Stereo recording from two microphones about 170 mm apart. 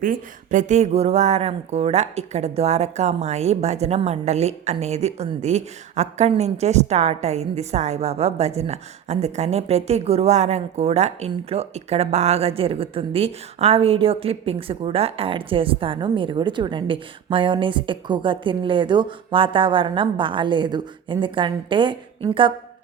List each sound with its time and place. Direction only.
0.0 s speech: 50° right (ahead or behind); by 22.5 s 30° right (ahead or behind)